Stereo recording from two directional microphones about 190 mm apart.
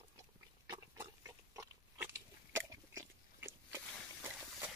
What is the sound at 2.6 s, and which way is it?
Dog, 15° right (ahead or behind).